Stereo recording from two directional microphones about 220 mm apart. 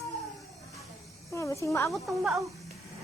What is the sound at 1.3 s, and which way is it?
Speech, 15° left (ahead or behind).